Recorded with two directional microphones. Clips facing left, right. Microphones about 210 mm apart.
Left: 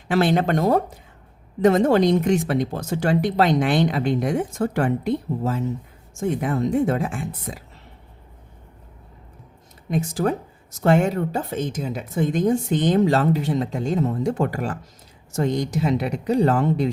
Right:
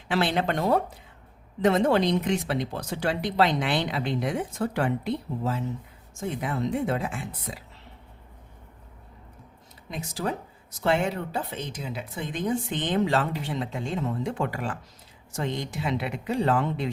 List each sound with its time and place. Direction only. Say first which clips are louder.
0.1 s speech: left 6 dB; 45° left (ahead or behind)
9.9 s speech: left 8 dB; 50° left (ahead or behind)